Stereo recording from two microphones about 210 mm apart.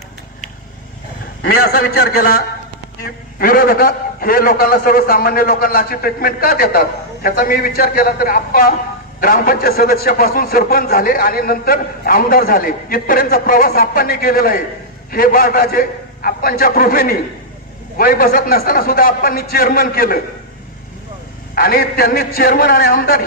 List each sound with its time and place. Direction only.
1.4 s a man's voice: 45° left (ahead or behind)
21.5 s a man's voice: 45° left (ahead or behind)